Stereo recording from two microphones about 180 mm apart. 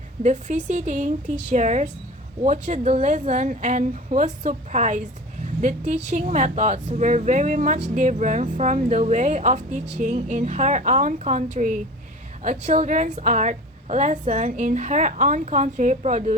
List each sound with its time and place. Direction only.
0.2 s a woman's voice: 40° right (ahead or behind)